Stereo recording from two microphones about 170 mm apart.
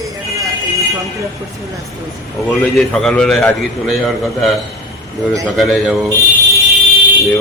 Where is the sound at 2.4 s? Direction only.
5° left (ahead or behind).